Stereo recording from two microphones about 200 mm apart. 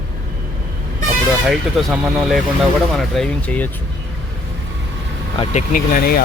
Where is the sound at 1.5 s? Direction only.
5° right (ahead or behind).